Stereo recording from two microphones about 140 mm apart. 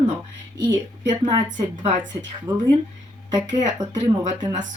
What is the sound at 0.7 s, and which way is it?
A woman's voice, 30° right (ahead or behind).